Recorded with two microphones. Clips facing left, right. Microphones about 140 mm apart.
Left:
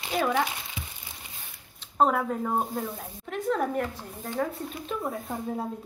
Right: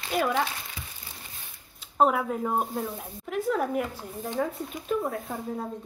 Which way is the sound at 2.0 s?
5° right (ahead or behind).